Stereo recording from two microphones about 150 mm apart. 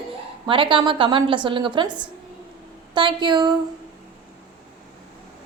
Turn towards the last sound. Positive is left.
turn(degrees=-30)  # may be behind; listen again after turning